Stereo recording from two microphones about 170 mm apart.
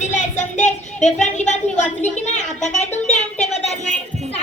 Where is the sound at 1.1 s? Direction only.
45° left (ahead or behind).